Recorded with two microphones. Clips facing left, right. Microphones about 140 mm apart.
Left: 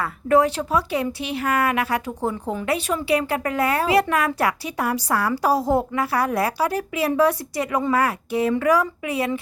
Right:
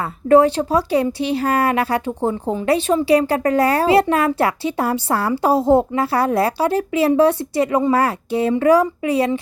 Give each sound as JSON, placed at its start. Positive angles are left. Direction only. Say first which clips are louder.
{"t": 0.0, "sound": "a woman's voice", "louder": "right 5 dB", "side_deg": -30}